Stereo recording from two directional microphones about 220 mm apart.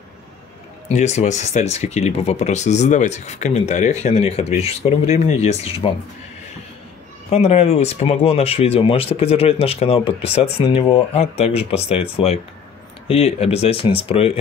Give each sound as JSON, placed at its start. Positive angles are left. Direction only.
{"t": 0.9, "sound": "speech", "side_deg": 30}
{"t": 7.2, "sound": "speech", "side_deg": 30}